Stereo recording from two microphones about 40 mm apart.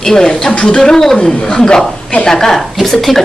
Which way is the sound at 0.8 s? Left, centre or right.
Centre.